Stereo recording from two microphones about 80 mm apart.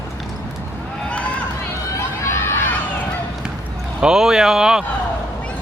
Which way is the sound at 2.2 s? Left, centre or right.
Left.